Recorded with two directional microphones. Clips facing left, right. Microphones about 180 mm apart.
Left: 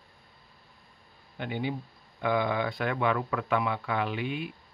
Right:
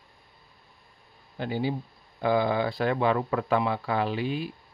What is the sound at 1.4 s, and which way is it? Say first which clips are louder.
Speech: right 4 dB; 35° right (ahead or behind).